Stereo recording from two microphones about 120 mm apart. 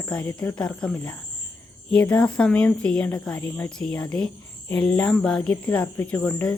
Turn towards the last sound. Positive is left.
turn(degrees=10)  # may be behind; listen again after turning